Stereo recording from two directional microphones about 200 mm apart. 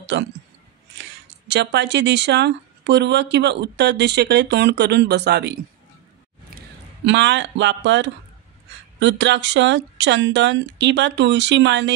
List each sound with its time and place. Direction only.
0.0 s speech: 65° right (ahead or behind)
1.5 s speech: 60° right (ahead or behind)
7.1 s speech: 65° right (ahead or behind)